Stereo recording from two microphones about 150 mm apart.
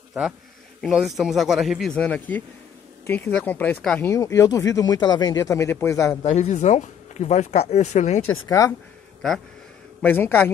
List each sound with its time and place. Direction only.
0.7 s speech: centre (ahead or behind)
4.1 s speech: 20° left (ahead or behind)
6.2 s speech: 45° left (ahead or behind)
8.5 s speech: 20° left (ahead or behind)
10.0 s speech: 15° left (ahead or behind)